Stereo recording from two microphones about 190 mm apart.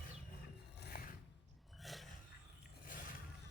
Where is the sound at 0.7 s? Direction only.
55° left (ahead or behind).